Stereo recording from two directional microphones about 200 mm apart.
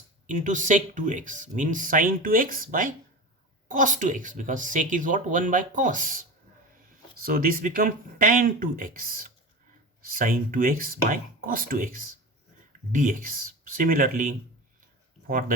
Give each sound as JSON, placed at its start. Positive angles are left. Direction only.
{"t": 0.3, "sound": "speech", "side_deg": -40}